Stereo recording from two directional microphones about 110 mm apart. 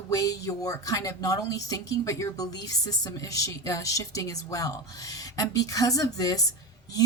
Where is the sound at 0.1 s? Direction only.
30° left (ahead or behind).